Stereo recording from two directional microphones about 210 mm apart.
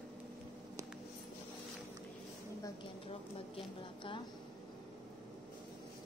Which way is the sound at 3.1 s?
25° left (ahead or behind).